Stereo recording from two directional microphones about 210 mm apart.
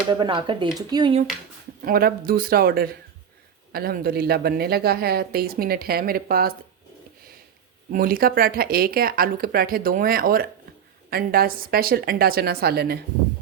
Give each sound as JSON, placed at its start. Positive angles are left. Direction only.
{"t": 0.1, "sound": "speech", "side_deg": -20}
{"t": 1.8, "sound": "a woman's voice", "side_deg": -45}
{"t": 7.9, "sound": "a woman's voice", "side_deg": -45}